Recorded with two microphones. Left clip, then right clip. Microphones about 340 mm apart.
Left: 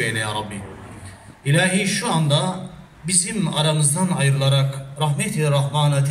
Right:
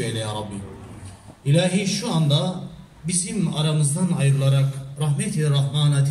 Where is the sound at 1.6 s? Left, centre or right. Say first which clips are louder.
Left 3 dB; left.